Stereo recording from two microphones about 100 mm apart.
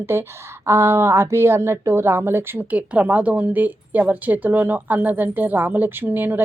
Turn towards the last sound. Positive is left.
turn(degrees=-20)  # may be behind; listen again after turning